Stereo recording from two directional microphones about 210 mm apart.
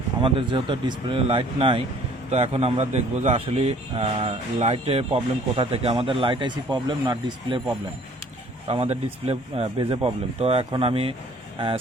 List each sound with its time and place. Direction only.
0.2 s a man's voice: 25° right (ahead or behind)
8.7 s a man's voice: 30° right (ahead or behind)